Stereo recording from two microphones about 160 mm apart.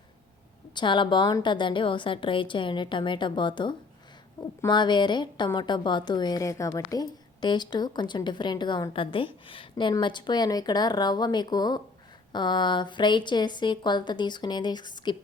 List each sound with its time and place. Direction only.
0.7 s a woman's voice: 30° left (ahead or behind)